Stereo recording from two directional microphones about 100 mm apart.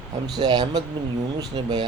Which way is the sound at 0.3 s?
45° right (ahead or behind).